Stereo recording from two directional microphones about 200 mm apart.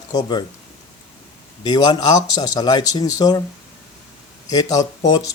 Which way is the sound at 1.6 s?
20° left (ahead or behind).